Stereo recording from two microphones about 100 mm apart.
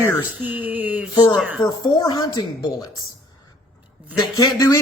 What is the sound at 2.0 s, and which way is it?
Speech, 45° left (ahead or behind).